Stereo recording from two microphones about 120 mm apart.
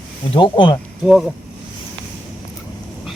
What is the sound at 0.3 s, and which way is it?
Speech, 40° left (ahead or behind).